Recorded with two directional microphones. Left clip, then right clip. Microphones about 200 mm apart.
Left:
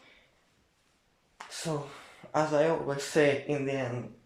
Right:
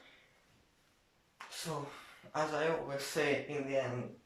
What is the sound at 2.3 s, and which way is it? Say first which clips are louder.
Mantra: left 8 dB; 35° left (ahead or behind).